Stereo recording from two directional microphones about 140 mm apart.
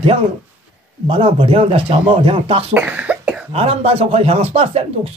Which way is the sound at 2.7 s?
10° right (ahead or behind).